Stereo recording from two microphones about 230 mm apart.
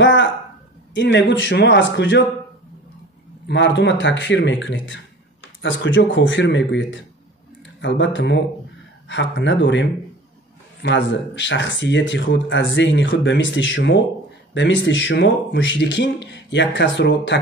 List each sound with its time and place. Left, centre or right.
0.0 s a sound: left
0.9 s speech: left
3.4 s speech: left